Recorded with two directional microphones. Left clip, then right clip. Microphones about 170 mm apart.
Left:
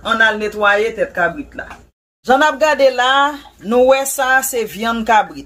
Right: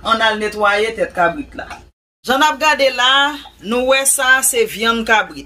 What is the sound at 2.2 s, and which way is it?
Speech, 65° left (ahead or behind).